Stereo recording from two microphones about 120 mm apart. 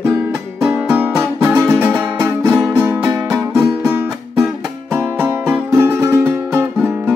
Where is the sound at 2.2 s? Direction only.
15° right (ahead or behind).